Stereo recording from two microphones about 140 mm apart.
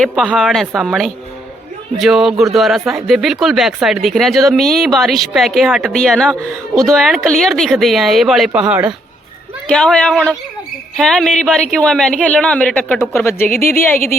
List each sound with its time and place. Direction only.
0.0 s speech: 5° left (ahead or behind)
9.6 s speech: 5° left (ahead or behind)